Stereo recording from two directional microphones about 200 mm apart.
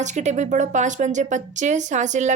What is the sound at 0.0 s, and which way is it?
A woman's voice, 35° right (ahead or behind).